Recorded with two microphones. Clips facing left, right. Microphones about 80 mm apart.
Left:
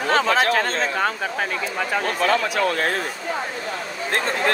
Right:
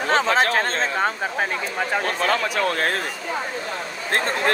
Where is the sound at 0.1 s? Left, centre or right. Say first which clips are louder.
Even; right.